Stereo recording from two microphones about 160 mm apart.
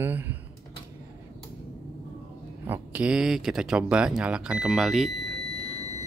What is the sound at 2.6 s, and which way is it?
Speech, 10° right (ahead or behind).